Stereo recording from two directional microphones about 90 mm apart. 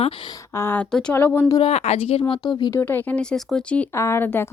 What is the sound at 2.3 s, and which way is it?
Speech, 55° left (ahead or behind).